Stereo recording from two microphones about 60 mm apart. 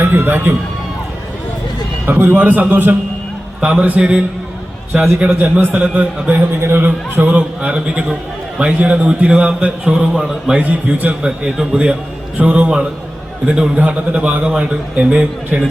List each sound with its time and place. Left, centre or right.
0.0 s a man's voice: right
2.0 s a man's voice: right
3.6 s a man's voice: centre
4.9 s a man's voice: centre
5.4 s a man's voice: right
6.6 s a man's voice: right; by 10.6 s centre
10.6 s a man's voice: right
12.4 s a man's voice: right